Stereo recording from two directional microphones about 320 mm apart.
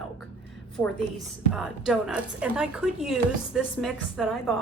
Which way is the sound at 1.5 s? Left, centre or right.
Centre.